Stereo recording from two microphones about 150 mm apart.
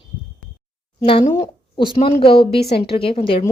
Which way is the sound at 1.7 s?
35° left (ahead or behind).